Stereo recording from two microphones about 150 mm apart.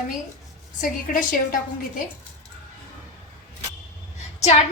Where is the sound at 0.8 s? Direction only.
60° left (ahead or behind).